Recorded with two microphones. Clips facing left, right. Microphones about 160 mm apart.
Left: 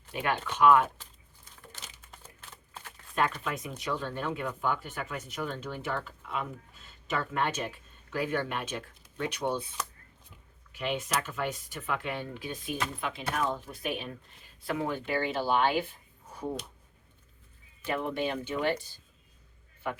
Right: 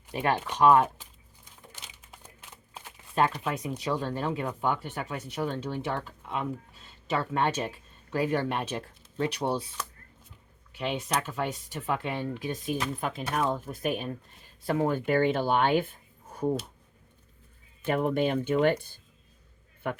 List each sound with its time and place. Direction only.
0.1 s speech: 35° right (ahead or behind)
2.0 s a sound: 10° right (ahead or behind)
3.2 s speech: 35° right (ahead or behind)
10.7 s speech: 30° right (ahead or behind); by 15.9 s 50° right (ahead or behind)
17.8 s speech: 50° right (ahead or behind)